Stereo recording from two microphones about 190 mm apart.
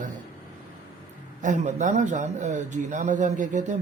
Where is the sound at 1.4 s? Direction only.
40° right (ahead or behind).